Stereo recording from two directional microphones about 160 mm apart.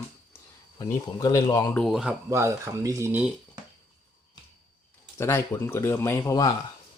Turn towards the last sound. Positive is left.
turn(degrees=20)  # may be behind; listen again after turning